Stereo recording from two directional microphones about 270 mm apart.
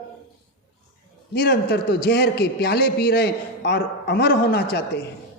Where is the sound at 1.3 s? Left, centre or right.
Left.